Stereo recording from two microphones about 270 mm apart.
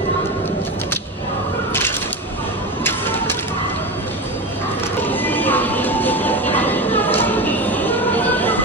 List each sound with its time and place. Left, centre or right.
1.7 s a sound: centre
2.8 s music: centre
5.0 s vehicle: centre